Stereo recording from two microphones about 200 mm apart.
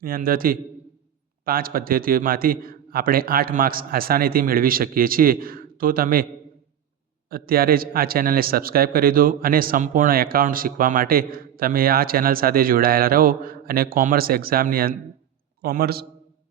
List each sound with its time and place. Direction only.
0.0 s a man's voice: 45° right (ahead or behind)
7.3 s a man's voice: 50° right (ahead or behind)